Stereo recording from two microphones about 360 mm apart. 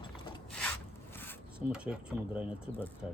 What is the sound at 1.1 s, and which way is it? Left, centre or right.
Zipper, centre.